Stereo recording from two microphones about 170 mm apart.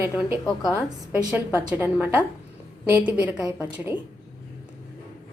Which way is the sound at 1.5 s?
10° right (ahead or behind).